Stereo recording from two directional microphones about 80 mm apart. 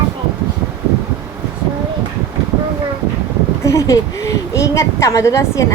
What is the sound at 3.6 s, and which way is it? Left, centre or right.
A woman's voice, left.